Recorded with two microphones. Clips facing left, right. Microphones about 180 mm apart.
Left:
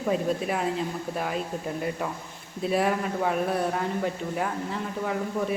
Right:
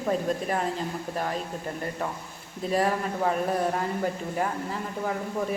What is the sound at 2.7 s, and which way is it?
Speech, centre (ahead or behind).